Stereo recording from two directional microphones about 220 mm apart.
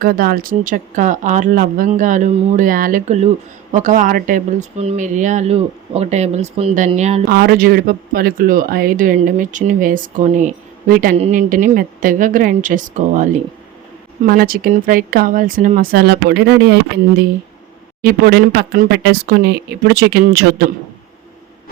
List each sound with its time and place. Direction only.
0.0 s speech: 45° right (ahead or behind)
7.3 s speech: 45° right (ahead or behind)
18.0 s speech: 45° right (ahead or behind)